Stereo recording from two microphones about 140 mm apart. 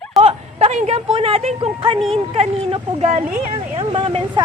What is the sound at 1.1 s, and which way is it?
A woman's voice, 40° right (ahead or behind).